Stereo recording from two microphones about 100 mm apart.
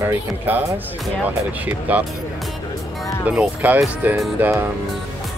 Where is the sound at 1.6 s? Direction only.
15° right (ahead or behind).